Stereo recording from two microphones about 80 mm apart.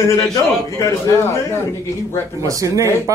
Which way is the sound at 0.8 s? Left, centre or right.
Left.